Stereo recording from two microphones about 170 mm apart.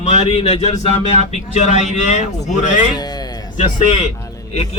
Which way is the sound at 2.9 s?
25° left (ahead or behind).